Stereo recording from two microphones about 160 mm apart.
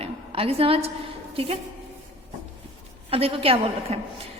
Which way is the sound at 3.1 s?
35° right (ahead or behind).